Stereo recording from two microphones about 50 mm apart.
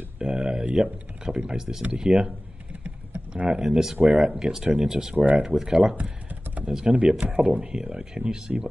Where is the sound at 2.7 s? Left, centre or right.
Right.